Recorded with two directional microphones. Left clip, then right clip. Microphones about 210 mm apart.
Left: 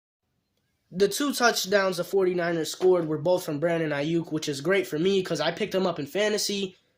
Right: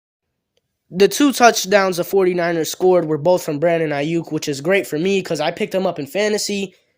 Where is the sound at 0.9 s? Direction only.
40° right (ahead or behind).